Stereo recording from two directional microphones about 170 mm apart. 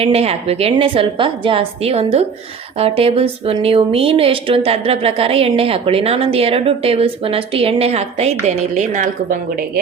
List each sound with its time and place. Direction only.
0.0 s a woman's voice: 35° right (ahead or behind)